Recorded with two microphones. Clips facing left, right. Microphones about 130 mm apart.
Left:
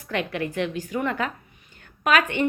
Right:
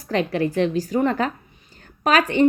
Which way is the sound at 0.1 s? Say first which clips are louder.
Right 6 dB; 35° right (ahead or behind).